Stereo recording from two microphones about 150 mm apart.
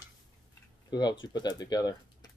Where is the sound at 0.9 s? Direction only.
30° left (ahead or behind).